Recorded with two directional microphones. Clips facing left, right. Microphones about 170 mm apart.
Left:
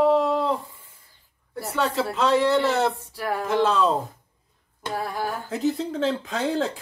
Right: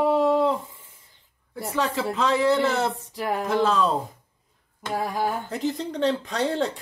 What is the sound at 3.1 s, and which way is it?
Speech, 20° right (ahead or behind).